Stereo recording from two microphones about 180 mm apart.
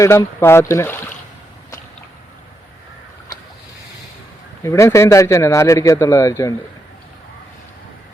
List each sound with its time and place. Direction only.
0.0 s a man's voice: 15° left (ahead or behind)
4.6 s a man's voice: 15° left (ahead or behind)